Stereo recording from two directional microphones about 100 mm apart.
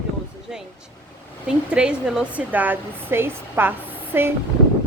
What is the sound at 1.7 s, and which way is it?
Speech, 10° right (ahead or behind).